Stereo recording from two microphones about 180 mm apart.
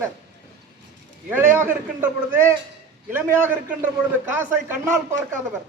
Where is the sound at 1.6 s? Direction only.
10° right (ahead or behind).